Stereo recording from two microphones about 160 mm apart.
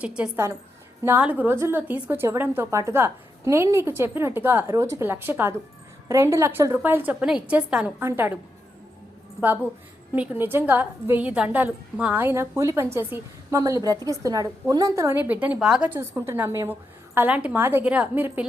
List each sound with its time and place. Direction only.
0.0 s a woman's voice: 5° right (ahead or behind)
10.2 s a woman's voice: 15° right (ahead or behind)